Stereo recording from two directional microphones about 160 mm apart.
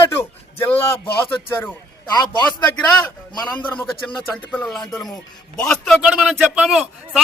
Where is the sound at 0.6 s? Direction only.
15° left (ahead or behind).